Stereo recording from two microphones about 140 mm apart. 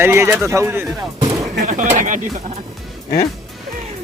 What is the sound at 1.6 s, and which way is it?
Speech, 70° right (ahead or behind).